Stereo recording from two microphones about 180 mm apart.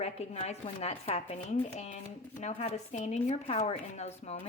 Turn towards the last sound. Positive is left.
turn(degrees=40)  # may be behind; listen again after turning